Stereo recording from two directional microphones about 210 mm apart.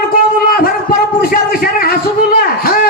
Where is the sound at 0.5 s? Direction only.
45° left (ahead or behind).